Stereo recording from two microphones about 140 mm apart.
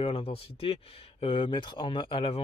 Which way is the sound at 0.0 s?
40° left (ahead or behind).